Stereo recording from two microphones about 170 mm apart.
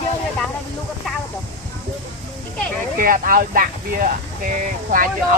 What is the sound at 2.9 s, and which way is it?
Speech, 55° right (ahead or behind).